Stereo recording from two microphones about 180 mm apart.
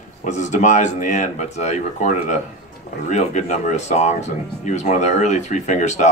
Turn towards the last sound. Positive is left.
turn(degrees=40)  # may be behind; listen again after turning